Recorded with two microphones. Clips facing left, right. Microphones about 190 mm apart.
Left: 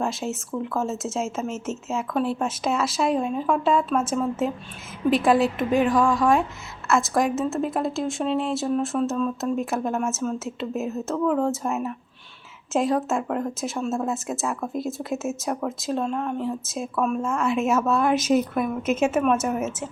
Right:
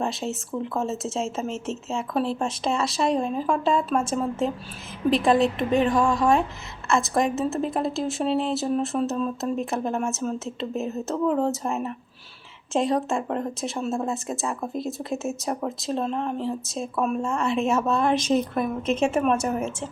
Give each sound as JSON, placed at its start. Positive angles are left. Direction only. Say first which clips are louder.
{"t": 0.0, "sound": "speech", "louder": "left 1 dB", "side_deg": 0}
{"t": 11.1, "sound": "speech", "louder": "even", "side_deg": -30}
{"t": 11.5, "sound": "speech", "louder": "left 1 dB", "side_deg": 0}